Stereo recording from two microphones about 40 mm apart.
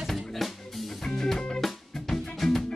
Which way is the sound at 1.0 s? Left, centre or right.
Centre.